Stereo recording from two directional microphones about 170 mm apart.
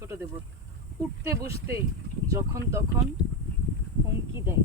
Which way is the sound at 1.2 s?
15° right (ahead or behind).